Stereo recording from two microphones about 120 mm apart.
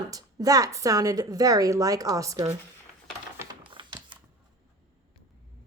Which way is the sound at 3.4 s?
20° right (ahead or behind).